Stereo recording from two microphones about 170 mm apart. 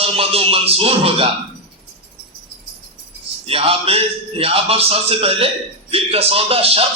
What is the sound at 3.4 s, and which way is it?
A man's voice, 35° right (ahead or behind).